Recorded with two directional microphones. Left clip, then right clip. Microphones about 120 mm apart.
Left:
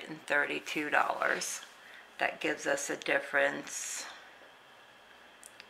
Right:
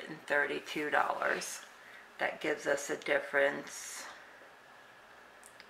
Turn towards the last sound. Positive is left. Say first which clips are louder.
# left 4 dB
turn(degrees=25)  # may be behind; listen again after turning